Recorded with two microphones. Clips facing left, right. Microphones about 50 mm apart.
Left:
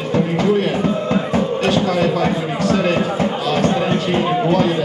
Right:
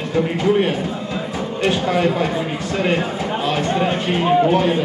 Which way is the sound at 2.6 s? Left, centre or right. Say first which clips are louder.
Left 4 dB; right.